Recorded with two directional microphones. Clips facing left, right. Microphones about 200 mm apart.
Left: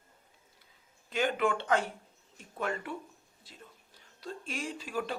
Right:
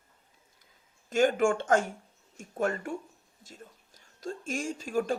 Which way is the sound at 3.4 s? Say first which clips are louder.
Right 5 dB; 45° right (ahead or behind).